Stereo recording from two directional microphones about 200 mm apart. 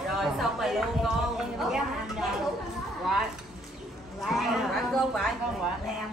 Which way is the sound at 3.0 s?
Centre (ahead or behind).